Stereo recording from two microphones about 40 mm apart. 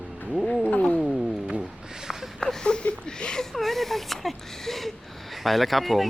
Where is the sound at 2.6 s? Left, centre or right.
Left.